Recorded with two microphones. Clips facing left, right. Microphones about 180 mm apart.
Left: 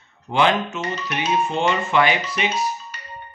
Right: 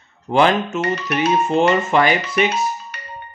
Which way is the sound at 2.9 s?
65° right (ahead or behind).